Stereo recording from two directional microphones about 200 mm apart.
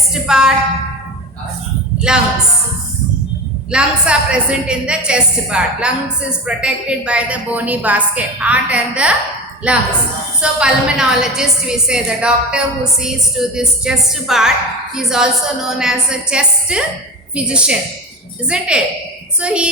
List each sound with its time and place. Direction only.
0.1 s a woman's voice: 5° right (ahead or behind)
2.1 s a woman's voice: 5° right (ahead or behind)
3.7 s a woman's voice: 5° right (ahead or behind)